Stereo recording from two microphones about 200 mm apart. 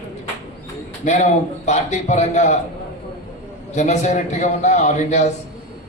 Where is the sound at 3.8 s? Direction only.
35° left (ahead or behind).